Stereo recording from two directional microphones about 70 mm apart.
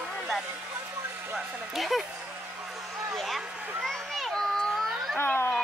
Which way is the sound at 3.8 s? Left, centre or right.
Centre.